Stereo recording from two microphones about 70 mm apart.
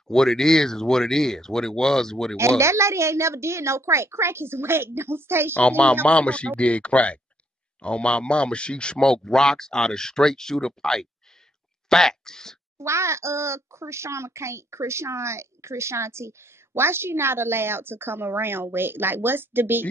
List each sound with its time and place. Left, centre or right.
0.1 s speech: centre
2.3 s a child's voice: right
5.5 s a child's voice: centre
12.7 s a child's voice: right